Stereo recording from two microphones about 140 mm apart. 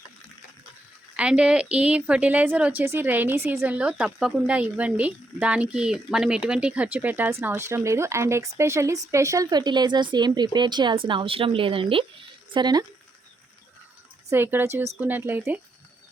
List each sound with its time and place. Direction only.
1.1 s a woman's voice: 10° right (ahead or behind); by 12.8 s 30° right (ahead or behind)
14.3 s a woman's voice: 15° right (ahead or behind)